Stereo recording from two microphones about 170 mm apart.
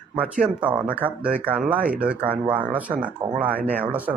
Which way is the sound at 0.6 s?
10° right (ahead or behind).